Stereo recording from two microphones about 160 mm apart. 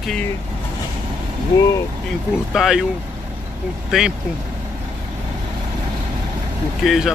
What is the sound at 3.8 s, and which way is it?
Speech, centre (ahead or behind).